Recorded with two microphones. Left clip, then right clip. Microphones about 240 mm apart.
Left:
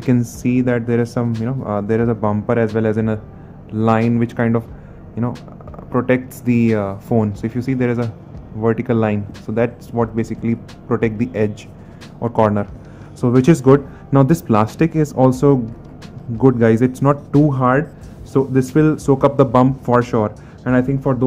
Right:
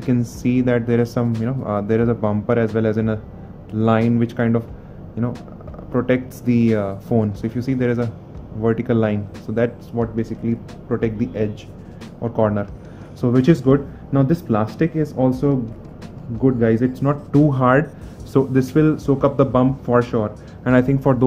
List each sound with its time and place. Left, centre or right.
0.0 s speech: centre
9.9 s speech: left
17.3 s speech: centre; by 20.3 s left
20.6 s speech: centre